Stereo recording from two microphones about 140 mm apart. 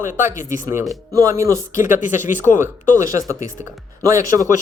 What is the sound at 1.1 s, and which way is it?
Speech, 25° right (ahead or behind).